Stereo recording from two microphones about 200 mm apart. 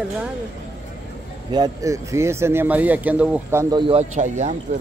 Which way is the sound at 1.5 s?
20° right (ahead or behind).